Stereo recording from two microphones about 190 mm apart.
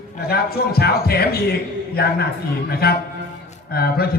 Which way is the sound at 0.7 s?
55° left (ahead or behind).